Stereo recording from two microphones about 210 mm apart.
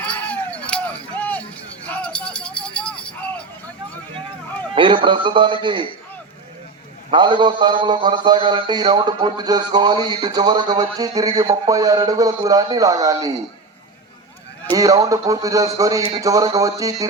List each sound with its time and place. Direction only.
0.0 s a sound: 5° left (ahead or behind)
1.9 s music: 5° left (ahead or behind)
4.7 s speech: 25° right (ahead or behind)
7.1 s speech: 20° right (ahead or behind)
14.7 s speech: 15° right (ahead or behind)